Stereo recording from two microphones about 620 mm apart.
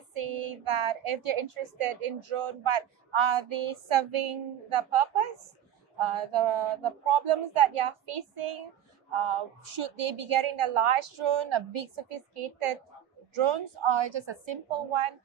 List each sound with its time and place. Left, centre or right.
0.1 s a woman's voice: right